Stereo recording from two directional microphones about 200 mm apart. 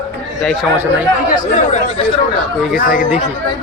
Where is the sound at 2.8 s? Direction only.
45° left (ahead or behind).